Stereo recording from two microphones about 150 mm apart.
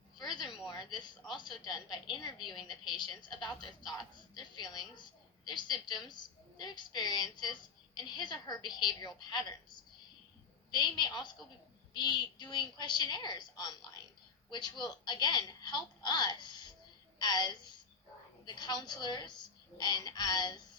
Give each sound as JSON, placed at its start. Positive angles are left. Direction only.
{"t": 0.2, "sound": "a sound", "side_deg": 30}
{"t": 0.7, "sound": "a woman's voice", "side_deg": 30}
{"t": 10.7, "sound": "a woman's voice", "side_deg": 30}